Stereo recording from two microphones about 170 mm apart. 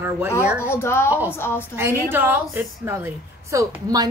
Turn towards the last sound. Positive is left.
turn(degrees=-20)  # may be behind; listen again after turning